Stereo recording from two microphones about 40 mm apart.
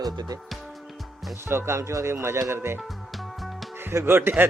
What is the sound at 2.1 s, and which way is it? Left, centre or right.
Speech, right.